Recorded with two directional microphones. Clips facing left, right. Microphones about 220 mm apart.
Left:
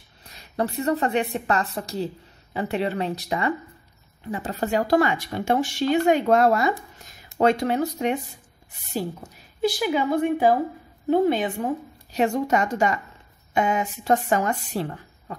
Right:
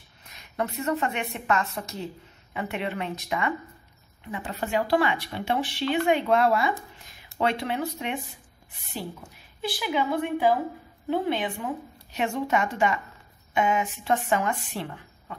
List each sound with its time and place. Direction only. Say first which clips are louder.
0.2 s a woman's voice: left 4 dB; 35° left (ahead or behind)